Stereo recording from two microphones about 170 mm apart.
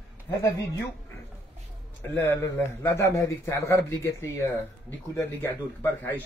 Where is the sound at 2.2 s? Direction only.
15° left (ahead or behind).